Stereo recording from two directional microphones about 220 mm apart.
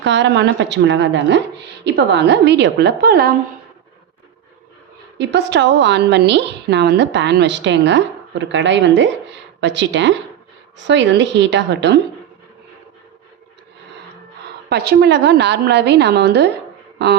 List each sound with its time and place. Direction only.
0.0 s a woman's voice: 55° right (ahead or behind)
5.1 s a woman's voice: 50° right (ahead or behind)
14.7 s a woman's voice: 50° right (ahead or behind)